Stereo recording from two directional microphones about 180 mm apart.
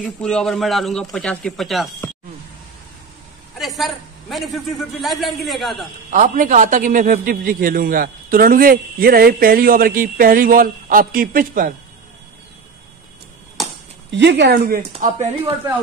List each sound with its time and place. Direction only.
0.0 s speech: 5° left (ahead or behind)
3.5 s a man's voice: centre (ahead or behind)
6.0 s a man's voice: 45° right (ahead or behind)
14.1 s speech: 75° right (ahead or behind)
15.0 s speech: 35° right (ahead or behind)